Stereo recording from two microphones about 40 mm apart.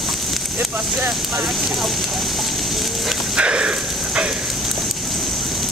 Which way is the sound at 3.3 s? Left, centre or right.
Right.